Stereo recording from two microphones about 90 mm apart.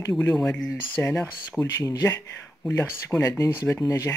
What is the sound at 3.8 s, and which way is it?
Speech, 40° left (ahead or behind).